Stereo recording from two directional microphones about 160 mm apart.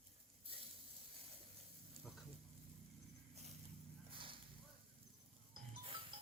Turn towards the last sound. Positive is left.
turn(degrees=-35)  # may be behind; listen again after turning